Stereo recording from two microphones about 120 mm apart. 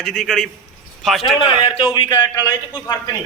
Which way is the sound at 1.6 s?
45° left (ahead or behind).